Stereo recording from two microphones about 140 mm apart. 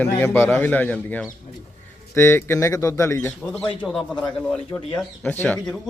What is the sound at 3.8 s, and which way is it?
Speech, centre (ahead or behind).